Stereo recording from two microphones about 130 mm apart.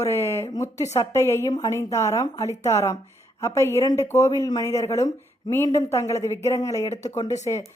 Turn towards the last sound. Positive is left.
turn(degrees=25)  # may be behind; listen again after turning